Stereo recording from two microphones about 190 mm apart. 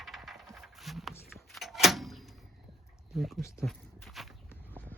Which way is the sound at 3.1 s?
Centre (ahead or behind).